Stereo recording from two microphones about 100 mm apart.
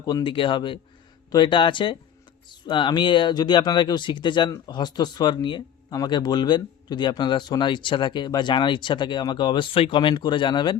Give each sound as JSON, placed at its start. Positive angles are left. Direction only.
{"t": 0.0, "sound": "speech", "side_deg": 40}
{"t": 0.3, "sound": "speech", "side_deg": 55}